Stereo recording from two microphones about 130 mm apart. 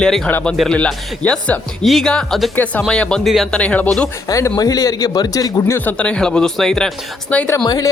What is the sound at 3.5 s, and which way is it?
Speech, 10° left (ahead or behind).